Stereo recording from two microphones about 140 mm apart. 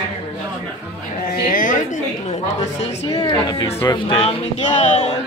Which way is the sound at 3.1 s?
25° left (ahead or behind).